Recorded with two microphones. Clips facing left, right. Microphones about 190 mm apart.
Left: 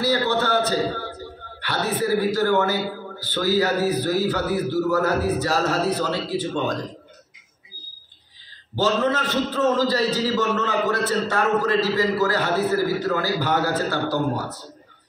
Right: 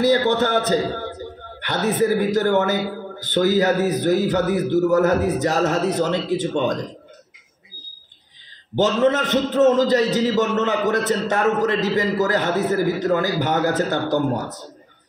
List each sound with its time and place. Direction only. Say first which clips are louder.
0.0 s a man's voice: right 4 dB; 20° right (ahead or behind)
8.7 s a man's voice: right 4 dB; 20° right (ahead or behind)